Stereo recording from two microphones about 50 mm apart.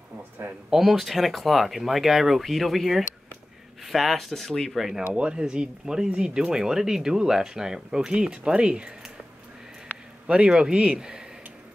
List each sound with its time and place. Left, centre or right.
0.7 s speech: centre
5.1 s speech: right
10.2 s speech: centre